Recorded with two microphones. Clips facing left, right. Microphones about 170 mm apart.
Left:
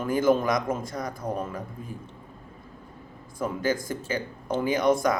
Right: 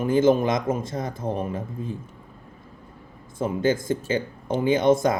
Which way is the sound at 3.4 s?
25° right (ahead or behind).